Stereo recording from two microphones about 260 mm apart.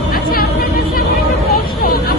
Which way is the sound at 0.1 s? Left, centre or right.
Left.